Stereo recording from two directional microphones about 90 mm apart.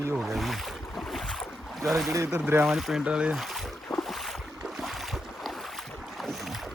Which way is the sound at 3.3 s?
Centre (ahead or behind).